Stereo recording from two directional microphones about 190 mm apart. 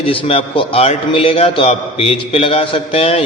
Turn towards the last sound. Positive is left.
turn(degrees=30)  # may be behind; listen again after turning